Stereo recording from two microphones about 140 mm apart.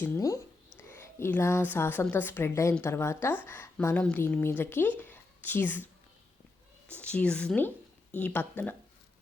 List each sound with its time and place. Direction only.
0.9 s a woman's voice: 15° left (ahead or behind)
6.9 s a woman's voice: 10° left (ahead or behind)